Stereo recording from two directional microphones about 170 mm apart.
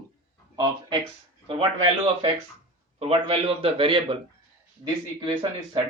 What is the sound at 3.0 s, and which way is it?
Speech, 35° right (ahead or behind).